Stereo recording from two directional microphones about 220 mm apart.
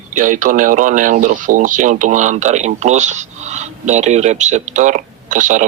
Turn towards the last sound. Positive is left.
turn(degrees=-35)  # may be behind; listen again after turning